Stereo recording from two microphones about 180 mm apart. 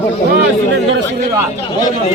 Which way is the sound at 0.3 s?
85° right.